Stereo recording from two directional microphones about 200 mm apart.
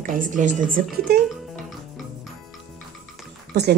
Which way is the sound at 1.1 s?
50° right (ahead or behind).